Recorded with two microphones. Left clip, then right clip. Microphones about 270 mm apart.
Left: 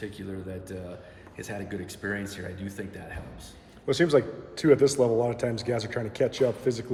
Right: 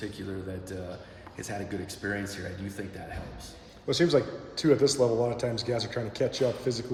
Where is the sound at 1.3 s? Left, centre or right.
Centre.